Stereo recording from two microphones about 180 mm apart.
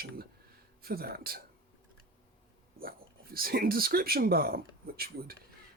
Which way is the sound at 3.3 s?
55° right (ahead or behind).